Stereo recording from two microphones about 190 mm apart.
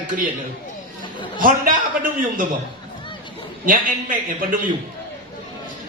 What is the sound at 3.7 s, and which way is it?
Speech, 45° right (ahead or behind).